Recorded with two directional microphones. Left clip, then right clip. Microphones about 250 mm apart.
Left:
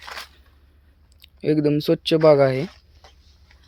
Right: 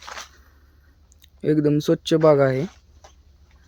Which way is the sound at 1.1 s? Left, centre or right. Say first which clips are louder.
Even; centre.